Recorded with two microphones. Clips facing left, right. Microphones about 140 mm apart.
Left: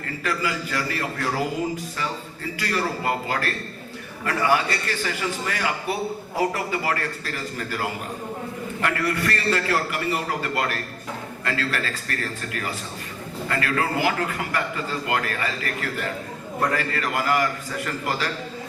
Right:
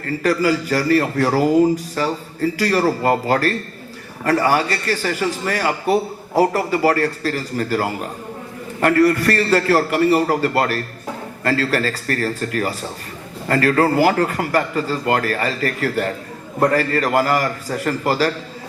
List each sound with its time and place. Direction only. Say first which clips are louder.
0.2 s a man's voice: right 10 dB; 40° right (ahead or behind)